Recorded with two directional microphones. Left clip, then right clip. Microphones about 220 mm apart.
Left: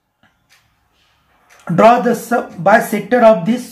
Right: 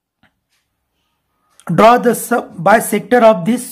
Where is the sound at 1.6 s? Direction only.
40° right (ahead or behind).